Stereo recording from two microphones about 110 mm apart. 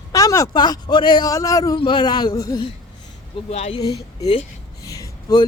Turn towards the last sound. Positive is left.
turn(degrees=35)  # may be behind; listen again after turning